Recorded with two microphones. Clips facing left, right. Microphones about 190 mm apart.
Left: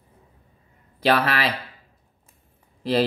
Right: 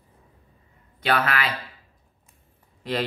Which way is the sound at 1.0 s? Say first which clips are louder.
Left 3 dB; 35° left (ahead or behind).